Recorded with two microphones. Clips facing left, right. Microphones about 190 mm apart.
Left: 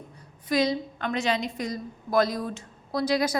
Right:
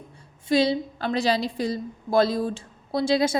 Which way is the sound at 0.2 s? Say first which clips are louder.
Right 3 dB; 30° right (ahead or behind).